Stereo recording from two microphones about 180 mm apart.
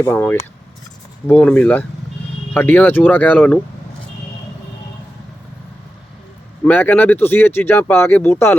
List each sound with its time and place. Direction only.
0.0 s speech: 10° left (ahead or behind)
6.7 s speech: 10° left (ahead or behind)